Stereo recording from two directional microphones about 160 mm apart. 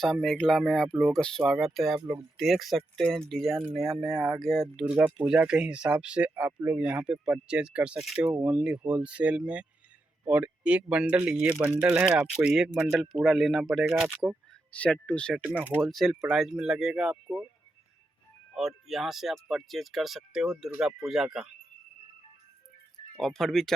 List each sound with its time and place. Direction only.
0.0 s speech: centre (ahead or behind)
2.0 s speech: 15° right (ahead or behind)
2.4 s speech: centre (ahead or behind)
14.7 s speech: 10° left (ahead or behind)
15.4 s speech: 10° right (ahead or behind)
15.9 s speech: centre (ahead or behind)
18.5 s speech: centre (ahead or behind)
23.2 s speech: centre (ahead or behind)